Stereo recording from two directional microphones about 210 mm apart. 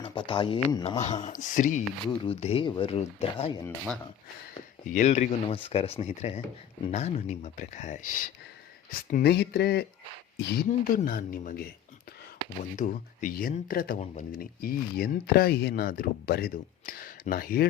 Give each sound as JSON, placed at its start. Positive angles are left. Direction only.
{"t": 0.0, "sound": "speech", "side_deg": 25}
{"t": 0.9, "sound": "speech", "side_deg": 30}
{"t": 4.9, "sound": "speech", "side_deg": 35}
{"t": 10.7, "sound": "speech", "side_deg": 40}
{"t": 12.7, "sound": "speech", "side_deg": 40}